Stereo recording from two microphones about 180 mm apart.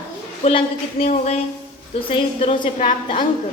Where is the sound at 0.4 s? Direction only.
35° left (ahead or behind).